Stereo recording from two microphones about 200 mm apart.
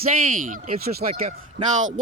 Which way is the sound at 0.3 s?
40° right (ahead or behind).